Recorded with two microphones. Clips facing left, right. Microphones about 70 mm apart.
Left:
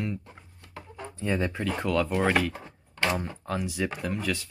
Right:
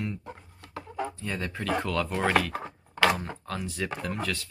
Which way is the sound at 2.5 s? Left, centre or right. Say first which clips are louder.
Right 7 dB; right.